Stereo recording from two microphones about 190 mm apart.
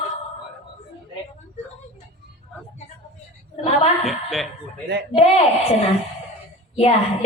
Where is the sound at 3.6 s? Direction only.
35° left (ahead or behind).